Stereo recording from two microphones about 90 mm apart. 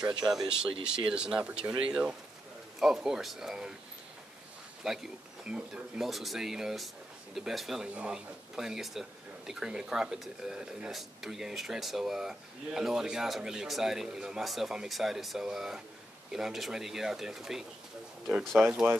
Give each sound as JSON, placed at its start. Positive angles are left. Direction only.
{"t": 0.2, "sound": "speech", "side_deg": -5}
{"t": 4.8, "sound": "speech", "side_deg": -5}
{"t": 7.9, "sound": "speech", "side_deg": -15}
{"t": 8.5, "sound": "speech", "side_deg": -5}